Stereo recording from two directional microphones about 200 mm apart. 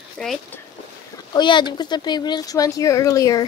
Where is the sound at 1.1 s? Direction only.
20° left (ahead or behind).